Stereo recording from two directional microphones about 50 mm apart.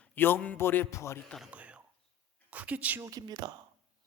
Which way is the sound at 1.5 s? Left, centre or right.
Right.